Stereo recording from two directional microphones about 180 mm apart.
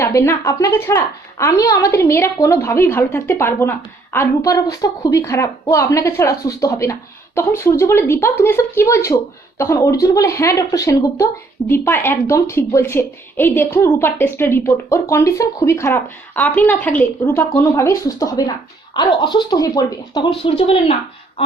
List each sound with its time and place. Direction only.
0.0 s speech: 15° left (ahead or behind)
20.4 s speech: 30° left (ahead or behind)